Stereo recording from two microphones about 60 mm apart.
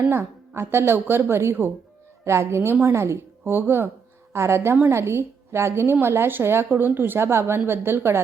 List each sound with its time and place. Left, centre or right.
0.1 s a woman's voice: right
4.3 s a woman's voice: right